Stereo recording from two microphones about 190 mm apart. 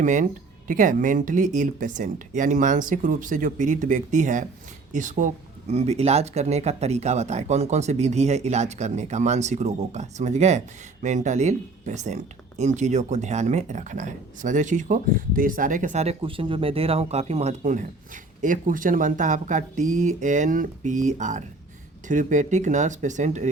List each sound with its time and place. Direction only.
0.0 s speech: 40° right (ahead or behind)